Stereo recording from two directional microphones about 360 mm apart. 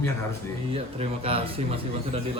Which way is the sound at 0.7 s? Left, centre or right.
Centre.